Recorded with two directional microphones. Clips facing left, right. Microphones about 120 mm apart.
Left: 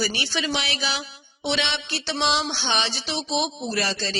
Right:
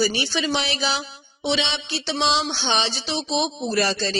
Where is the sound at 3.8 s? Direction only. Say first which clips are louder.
Right 5 dB; 40° right (ahead or behind).